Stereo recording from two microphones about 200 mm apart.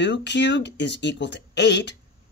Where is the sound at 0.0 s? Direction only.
60° left (ahead or behind).